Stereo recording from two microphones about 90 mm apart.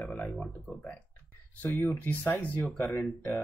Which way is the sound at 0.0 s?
20° left (ahead or behind).